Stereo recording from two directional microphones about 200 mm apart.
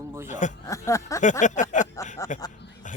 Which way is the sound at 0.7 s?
15° left (ahead or behind).